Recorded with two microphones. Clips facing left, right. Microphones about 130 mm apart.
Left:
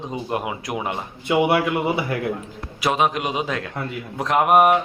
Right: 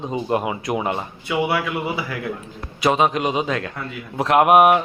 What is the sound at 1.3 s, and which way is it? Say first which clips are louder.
Speech: left 3 dB; 25° left (ahead or behind).